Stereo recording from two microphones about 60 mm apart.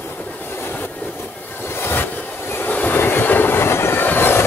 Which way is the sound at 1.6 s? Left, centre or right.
Left.